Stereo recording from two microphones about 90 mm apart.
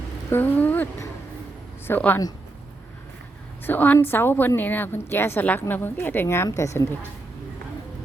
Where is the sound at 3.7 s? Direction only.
20° left (ahead or behind).